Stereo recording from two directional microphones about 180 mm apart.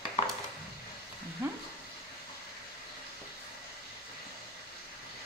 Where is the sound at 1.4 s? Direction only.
10° right (ahead or behind).